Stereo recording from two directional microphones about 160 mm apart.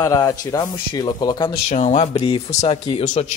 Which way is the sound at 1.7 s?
50° left (ahead or behind).